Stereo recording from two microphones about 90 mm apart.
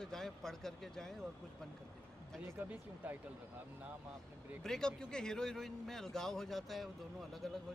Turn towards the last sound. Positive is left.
turn(degrees=0)  # may be behind; listen again after turning